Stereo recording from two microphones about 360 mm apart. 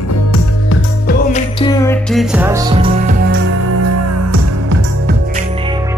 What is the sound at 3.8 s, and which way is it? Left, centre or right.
Music, right.